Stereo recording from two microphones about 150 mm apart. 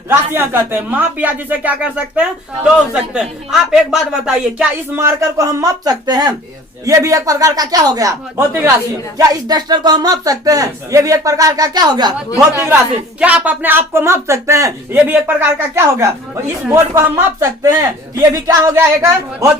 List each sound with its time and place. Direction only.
0.1 s speech: 15° right (ahead or behind)
4.9 s speech: 20° right (ahead or behind)
13.1 s speech: 10° right (ahead or behind)